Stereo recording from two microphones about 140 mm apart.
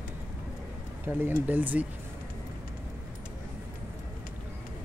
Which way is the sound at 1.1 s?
15° right (ahead or behind).